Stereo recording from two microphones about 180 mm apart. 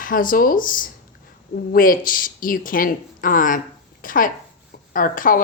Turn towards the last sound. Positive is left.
turn(degrees=50)  # may be behind; listen again after turning